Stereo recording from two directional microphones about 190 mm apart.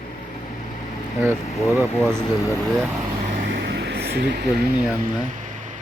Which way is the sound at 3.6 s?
65° right (ahead or behind).